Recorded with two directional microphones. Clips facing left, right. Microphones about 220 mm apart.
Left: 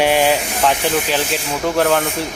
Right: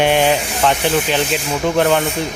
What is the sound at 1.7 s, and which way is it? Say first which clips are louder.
Speech: right 1 dB; centre (ahead or behind).